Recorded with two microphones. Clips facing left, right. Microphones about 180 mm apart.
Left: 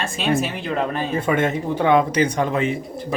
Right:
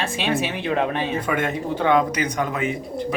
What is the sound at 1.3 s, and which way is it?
Speech, 25° left (ahead or behind).